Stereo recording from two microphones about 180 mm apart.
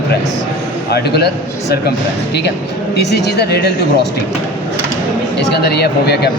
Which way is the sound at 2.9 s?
65° left (ahead or behind).